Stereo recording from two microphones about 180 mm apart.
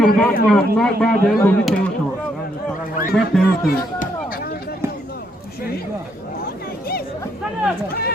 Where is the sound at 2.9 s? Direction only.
50° left (ahead or behind).